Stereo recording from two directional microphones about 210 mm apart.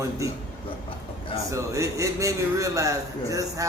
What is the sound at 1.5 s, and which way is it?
A man's voice, 15° right (ahead or behind).